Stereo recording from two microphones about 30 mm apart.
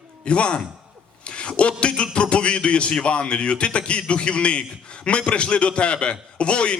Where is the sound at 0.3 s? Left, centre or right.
Left.